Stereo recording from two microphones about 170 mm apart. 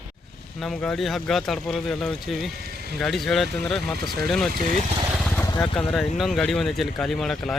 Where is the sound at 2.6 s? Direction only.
65° right (ahead or behind).